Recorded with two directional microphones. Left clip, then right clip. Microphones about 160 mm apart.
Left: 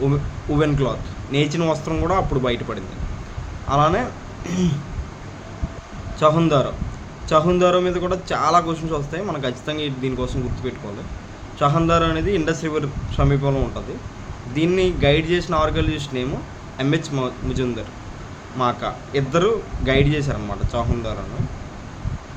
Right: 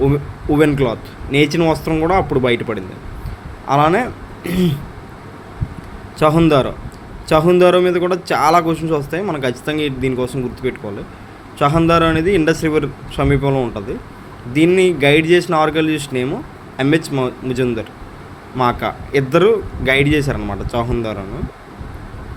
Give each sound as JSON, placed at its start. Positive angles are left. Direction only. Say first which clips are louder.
{"t": 0.0, "sound": "a man's voice", "louder": "right 6 dB", "side_deg": -30}
{"t": 6.1, "sound": "a man's voice", "louder": "right 4 dB", "side_deg": -30}